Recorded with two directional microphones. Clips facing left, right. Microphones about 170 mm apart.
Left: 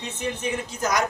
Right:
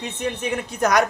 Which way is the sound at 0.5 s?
65° right (ahead or behind).